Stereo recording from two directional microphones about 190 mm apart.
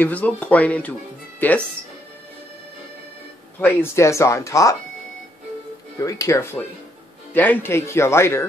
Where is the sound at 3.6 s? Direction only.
10° left (ahead or behind).